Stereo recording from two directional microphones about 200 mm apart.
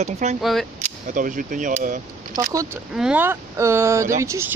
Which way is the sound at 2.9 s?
5° right (ahead or behind).